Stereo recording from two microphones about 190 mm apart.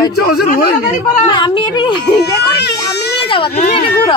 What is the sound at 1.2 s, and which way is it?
Speech, 25° left (ahead or behind).